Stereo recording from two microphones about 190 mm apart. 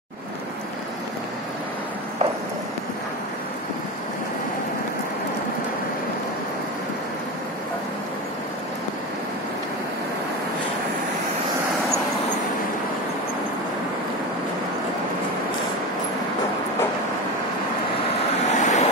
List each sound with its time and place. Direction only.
18.5 s vehicle: 40° left (ahead or behind)